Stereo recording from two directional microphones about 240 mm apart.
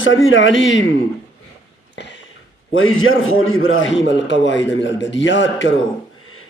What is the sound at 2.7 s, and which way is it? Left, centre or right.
A man's voice, left.